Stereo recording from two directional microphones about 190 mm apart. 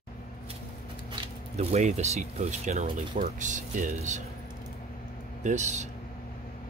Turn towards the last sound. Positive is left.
turn(degrees=-40)  # may be behind; listen again after turning